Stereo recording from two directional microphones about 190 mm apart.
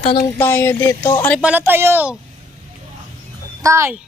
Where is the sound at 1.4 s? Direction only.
10° right (ahead or behind).